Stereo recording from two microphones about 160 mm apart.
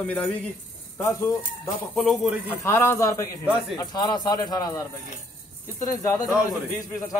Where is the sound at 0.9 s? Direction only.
15° left (ahead or behind).